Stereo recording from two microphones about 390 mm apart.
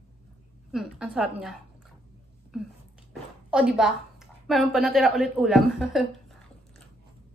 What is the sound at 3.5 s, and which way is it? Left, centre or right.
A woman's voice, centre.